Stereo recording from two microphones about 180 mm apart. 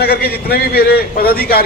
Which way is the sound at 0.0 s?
60° left (ahead or behind).